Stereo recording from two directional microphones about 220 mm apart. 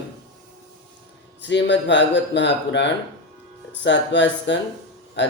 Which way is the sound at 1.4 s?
55° left (ahead or behind).